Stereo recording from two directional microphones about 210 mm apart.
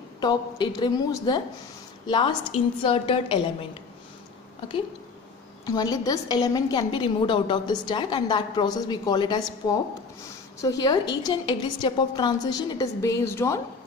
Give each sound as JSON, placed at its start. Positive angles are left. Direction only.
{"t": 0.2, "sound": "a woman's voice", "side_deg": 20}
{"t": 5.7, "sound": "a woman's voice", "side_deg": 20}